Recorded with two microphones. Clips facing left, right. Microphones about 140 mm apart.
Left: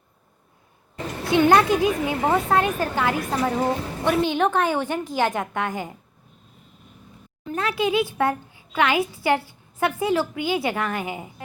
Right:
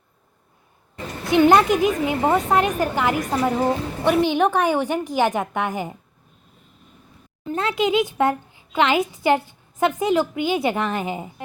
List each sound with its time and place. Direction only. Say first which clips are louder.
1.2 s a woman's voice: right 2 dB; 20° right (ahead or behind)
7.4 s a woman's voice: right 2 dB; 25° right (ahead or behind)